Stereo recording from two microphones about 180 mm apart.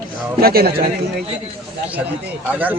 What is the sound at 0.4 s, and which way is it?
Speech, 55° right (ahead or behind).